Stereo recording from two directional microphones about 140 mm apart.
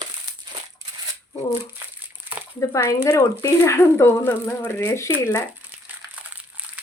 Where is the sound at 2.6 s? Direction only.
25° left (ahead or behind).